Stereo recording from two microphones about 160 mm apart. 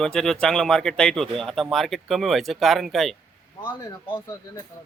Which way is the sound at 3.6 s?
25° left (ahead or behind).